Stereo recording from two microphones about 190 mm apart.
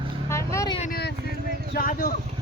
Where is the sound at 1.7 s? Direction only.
50° left (ahead or behind).